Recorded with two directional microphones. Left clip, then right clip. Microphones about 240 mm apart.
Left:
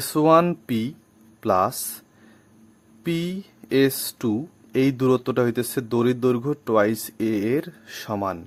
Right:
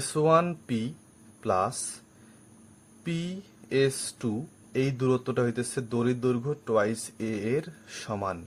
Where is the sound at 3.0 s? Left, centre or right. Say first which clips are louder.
Left 9 dB; left.